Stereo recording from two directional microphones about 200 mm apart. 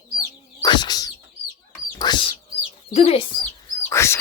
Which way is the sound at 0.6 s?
20° left (ahead or behind).